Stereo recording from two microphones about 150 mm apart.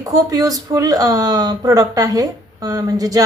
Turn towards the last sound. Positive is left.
turn(degrees=-25)  # may be behind; listen again after turning